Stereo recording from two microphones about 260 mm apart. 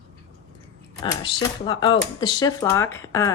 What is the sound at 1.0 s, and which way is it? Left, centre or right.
A woman's voice, centre.